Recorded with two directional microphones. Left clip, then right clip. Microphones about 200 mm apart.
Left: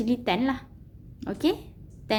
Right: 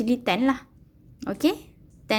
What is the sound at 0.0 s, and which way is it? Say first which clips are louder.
A woman's voice: right 3 dB; 25° right (ahead or behind).